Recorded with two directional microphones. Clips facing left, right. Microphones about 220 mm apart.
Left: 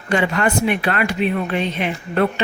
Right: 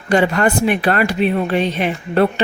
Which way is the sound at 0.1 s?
35° right (ahead or behind).